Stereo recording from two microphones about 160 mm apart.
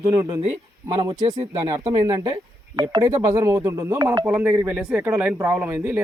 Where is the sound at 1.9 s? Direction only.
25° right (ahead or behind).